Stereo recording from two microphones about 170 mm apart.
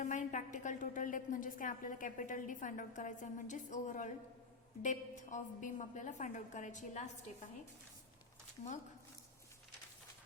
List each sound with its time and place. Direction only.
0.0 s a woman's voice: 45° left (ahead or behind)